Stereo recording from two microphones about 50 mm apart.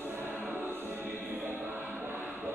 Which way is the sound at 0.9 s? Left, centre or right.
Right.